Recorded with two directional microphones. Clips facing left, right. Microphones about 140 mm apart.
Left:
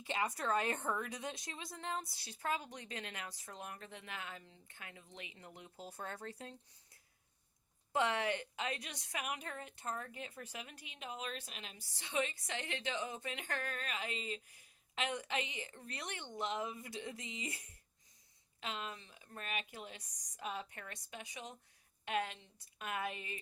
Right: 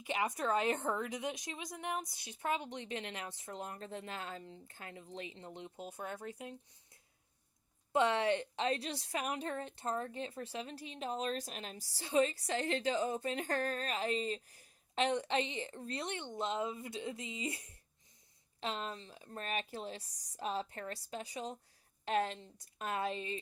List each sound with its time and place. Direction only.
0.0 s a woman's voice: 20° right (ahead or behind)
18.6 s a woman's voice: 35° right (ahead or behind)